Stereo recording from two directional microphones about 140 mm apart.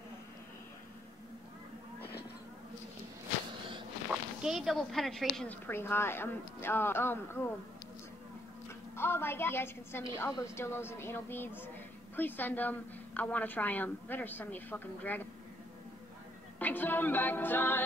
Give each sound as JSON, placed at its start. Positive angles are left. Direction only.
{"t": 4.1, "sound": "speech", "side_deg": -5}
{"t": 5.7, "sound": "a woman's voice", "side_deg": 15}
{"t": 8.9, "sound": "a woman's voice", "side_deg": 15}
{"t": 16.5, "sound": "a woman's voice", "side_deg": 15}